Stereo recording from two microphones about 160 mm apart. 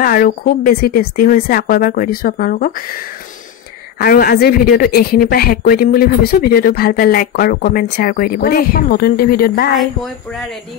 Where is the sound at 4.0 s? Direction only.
70° left (ahead or behind).